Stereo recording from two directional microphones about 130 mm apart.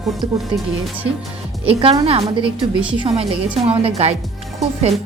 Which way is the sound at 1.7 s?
45° right (ahead or behind).